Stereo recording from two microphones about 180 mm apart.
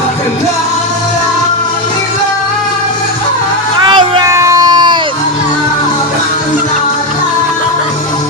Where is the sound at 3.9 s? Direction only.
25° right (ahead or behind).